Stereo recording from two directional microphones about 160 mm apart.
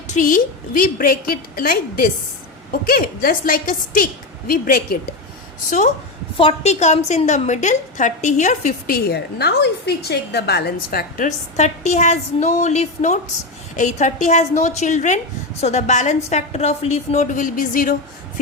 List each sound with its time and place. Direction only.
0.1 s a woman's voice: 55° left (ahead or behind)
6.3 s a woman's voice: 40° left (ahead or behind)
9.0 s a woman's voice: 90° left
11.3 s a woman's voice: 45° left (ahead or behind)